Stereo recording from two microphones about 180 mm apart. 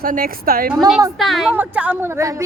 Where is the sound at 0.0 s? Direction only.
50° right (ahead or behind).